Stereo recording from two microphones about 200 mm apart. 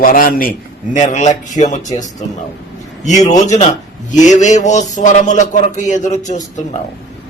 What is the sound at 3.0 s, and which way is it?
Speech, 35° left (ahead or behind).